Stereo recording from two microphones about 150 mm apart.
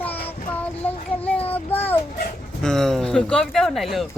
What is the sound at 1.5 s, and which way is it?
A child's voice, 10° left (ahead or behind).